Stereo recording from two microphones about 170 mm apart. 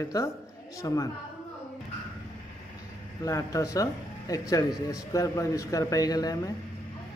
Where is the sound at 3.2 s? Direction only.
20° left (ahead or behind).